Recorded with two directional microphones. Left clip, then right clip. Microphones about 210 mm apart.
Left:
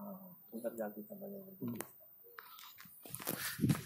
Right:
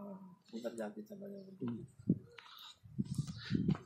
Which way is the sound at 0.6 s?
25° left (ahead or behind).